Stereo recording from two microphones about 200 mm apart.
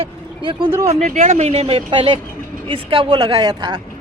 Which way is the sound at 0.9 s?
35° right (ahead or behind).